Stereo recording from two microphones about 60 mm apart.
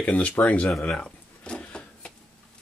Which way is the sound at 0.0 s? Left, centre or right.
Left.